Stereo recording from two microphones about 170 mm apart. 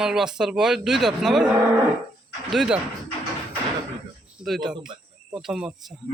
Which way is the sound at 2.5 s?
Centre (ahead or behind).